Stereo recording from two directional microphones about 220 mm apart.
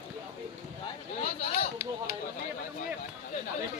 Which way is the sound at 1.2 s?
25° left (ahead or behind).